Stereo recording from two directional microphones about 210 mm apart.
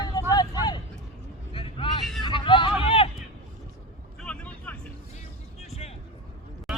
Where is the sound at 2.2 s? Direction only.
25° left (ahead or behind).